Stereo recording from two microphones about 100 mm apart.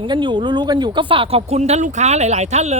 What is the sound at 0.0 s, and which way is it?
Speech, 50° right (ahead or behind).